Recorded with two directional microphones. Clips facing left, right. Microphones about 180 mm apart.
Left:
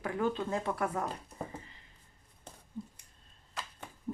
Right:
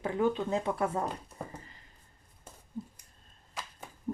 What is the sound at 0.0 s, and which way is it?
Speech, 20° right (ahead or behind).